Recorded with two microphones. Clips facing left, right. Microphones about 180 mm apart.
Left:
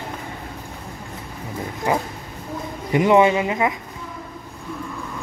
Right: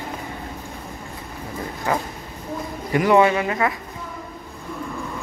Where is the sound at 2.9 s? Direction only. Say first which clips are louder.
Left 1 dB; 20° left (ahead or behind).